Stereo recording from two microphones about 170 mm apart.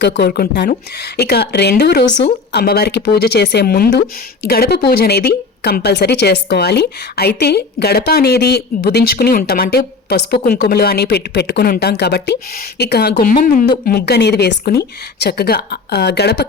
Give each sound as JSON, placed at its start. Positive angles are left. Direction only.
{"t": 0.0, "sound": "speech", "side_deg": 70}
{"t": 12.8, "sound": "speech", "side_deg": 70}
{"t": 13.7, "sound": "speech", "side_deg": 65}